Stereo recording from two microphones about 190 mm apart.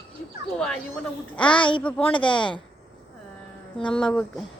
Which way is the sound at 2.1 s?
25° left (ahead or behind).